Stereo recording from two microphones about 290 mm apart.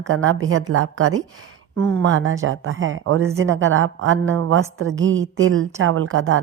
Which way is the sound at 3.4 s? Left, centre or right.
Right.